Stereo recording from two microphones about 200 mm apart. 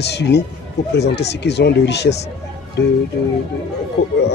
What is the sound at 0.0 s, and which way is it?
A man's voice, 55° left (ahead or behind).